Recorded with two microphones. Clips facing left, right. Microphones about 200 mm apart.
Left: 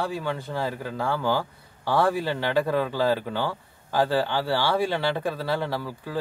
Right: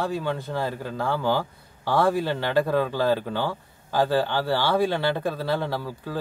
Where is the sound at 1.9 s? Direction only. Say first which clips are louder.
Right 1 dB; 10° left (ahead or behind).